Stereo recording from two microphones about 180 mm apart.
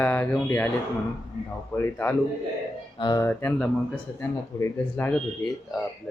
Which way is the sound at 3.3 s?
10° left (ahead or behind).